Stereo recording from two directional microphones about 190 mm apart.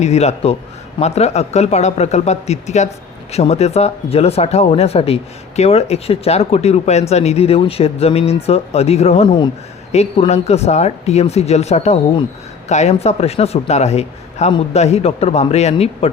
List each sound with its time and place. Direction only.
0.0 s speech: 35° left (ahead or behind)